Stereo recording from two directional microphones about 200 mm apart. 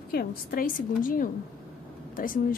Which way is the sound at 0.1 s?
50° left (ahead or behind).